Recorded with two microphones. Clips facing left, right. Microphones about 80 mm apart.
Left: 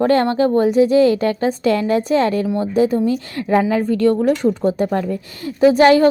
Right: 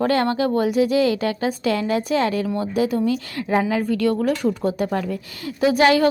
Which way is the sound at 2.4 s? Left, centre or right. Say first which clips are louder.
Left 5 dB; left.